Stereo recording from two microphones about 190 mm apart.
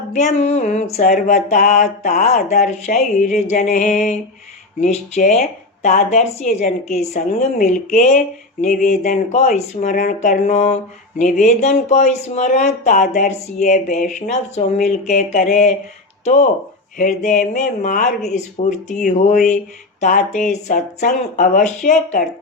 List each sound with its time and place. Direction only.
0.1 s speech: 40° left (ahead or behind)